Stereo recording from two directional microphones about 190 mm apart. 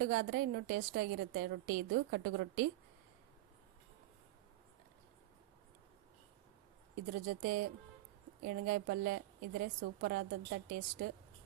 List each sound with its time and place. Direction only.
0.0 s a woman's voice: 50° right (ahead or behind)
7.1 s a woman's voice: 50° right (ahead or behind)